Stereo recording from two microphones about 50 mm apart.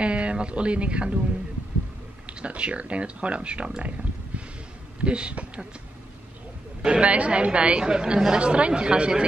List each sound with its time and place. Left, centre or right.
0.0 s speech: right
2.2 s a woman's voice: right
5.0 s a woman's voice: right
6.8 s a woman's voice: right